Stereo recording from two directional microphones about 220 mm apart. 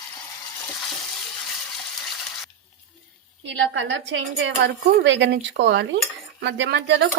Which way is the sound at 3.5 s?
55° right (ahead or behind).